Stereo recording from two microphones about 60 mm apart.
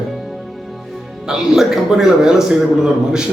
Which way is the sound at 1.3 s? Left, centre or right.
Centre.